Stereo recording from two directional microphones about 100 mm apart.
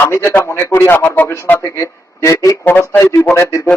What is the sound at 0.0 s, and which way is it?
Speech, 25° left (ahead or behind).